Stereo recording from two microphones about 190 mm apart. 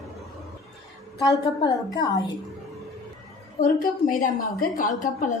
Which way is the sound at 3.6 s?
50° left (ahead or behind).